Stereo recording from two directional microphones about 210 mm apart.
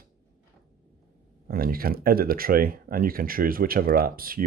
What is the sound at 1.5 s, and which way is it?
Speech, 45° right (ahead or behind).